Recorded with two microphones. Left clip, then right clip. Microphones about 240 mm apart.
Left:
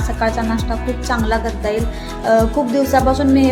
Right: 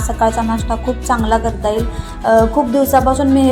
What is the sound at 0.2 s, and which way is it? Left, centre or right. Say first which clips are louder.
Music: right 4 dB; centre.